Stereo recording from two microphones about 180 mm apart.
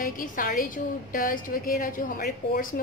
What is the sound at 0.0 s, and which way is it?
A woman's voice, 50° left (ahead or behind).